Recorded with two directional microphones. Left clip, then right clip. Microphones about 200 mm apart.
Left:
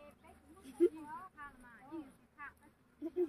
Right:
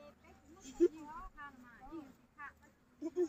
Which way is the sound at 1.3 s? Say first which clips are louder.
Even; 55° left (ahead or behind).